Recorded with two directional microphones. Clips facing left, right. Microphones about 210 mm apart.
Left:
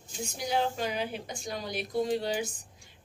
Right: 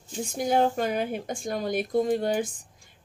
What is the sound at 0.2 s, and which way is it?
Speech, 50° right (ahead or behind).